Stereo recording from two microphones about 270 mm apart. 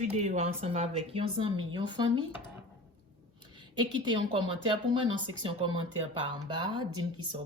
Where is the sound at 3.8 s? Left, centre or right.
Centre.